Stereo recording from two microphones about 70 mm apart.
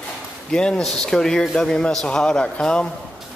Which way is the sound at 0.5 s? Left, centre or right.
Centre.